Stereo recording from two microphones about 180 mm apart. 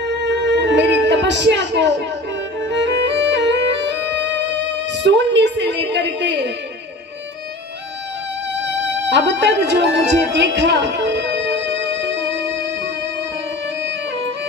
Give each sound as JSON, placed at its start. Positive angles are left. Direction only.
{"t": 0.0, "sound": "music", "side_deg": -75}
{"t": 4.9, "sound": "speech", "side_deg": -75}
{"t": 9.1, "sound": "speech", "side_deg": -75}